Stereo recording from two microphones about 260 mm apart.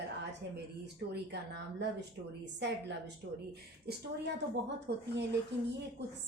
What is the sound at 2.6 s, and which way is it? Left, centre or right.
Speech, right.